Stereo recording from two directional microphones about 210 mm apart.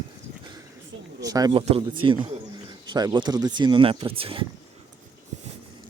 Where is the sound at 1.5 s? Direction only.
30° right (ahead or behind).